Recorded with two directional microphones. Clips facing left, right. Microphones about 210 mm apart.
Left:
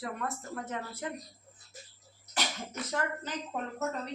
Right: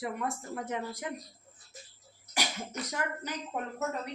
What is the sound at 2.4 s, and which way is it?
Cough, 10° right (ahead or behind).